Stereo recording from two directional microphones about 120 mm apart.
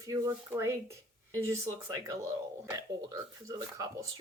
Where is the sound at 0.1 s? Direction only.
25° right (ahead or behind).